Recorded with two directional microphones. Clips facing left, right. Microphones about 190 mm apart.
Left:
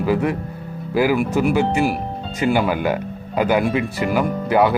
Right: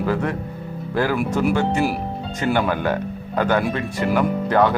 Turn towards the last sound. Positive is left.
turn(degrees=10)  # may be behind; listen again after turning